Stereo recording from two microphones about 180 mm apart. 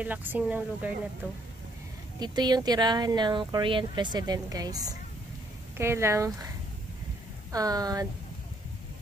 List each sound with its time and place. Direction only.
0.0 s speech: 10° right (ahead or behind)
2.1 s speech: 25° right (ahead or behind)
7.5 s speech: 20° right (ahead or behind)